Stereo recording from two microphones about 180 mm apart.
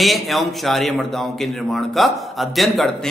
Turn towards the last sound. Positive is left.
turn(degrees=0)  # may be behind; listen again after turning